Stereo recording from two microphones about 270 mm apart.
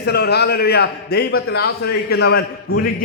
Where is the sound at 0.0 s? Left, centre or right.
Left.